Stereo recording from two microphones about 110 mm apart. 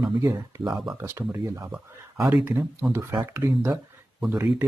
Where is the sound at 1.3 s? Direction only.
25° right (ahead or behind).